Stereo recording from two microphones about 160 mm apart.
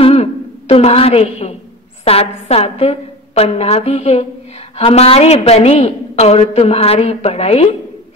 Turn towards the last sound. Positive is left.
turn(degrees=40)  # may be behind; listen again after turning